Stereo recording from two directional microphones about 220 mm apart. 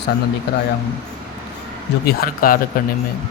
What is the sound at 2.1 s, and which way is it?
Speech, 40° left (ahead or behind).